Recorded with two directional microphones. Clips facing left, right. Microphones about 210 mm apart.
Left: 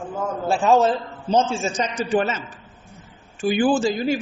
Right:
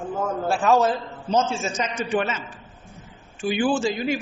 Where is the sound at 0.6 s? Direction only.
25° left (ahead or behind).